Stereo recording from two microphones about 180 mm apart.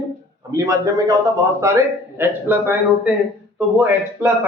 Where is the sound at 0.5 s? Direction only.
20° right (ahead or behind).